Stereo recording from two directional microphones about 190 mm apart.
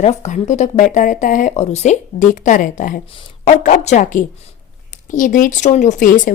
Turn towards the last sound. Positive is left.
turn(degrees=45)  # may be behind; listen again after turning